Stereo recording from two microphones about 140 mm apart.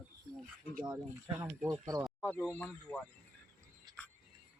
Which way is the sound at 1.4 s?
25° right (ahead or behind).